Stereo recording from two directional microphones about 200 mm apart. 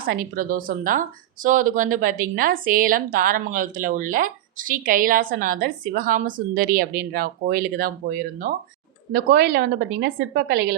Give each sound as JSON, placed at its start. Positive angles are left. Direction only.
{"t": 0.0, "sound": "speech", "side_deg": -45}